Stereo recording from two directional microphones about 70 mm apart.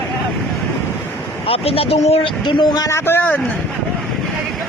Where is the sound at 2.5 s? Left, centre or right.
Left.